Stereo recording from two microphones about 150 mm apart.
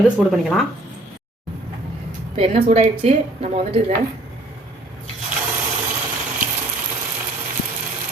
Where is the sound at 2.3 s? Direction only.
45° right (ahead or behind).